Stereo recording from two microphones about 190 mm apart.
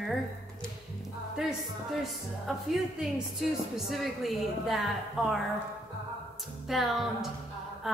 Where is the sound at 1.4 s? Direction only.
5° right (ahead or behind).